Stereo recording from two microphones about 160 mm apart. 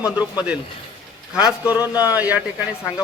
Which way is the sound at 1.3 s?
5° right (ahead or behind).